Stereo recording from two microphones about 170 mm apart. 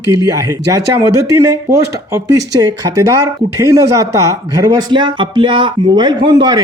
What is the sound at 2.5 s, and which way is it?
A man's voice, 20° right (ahead or behind).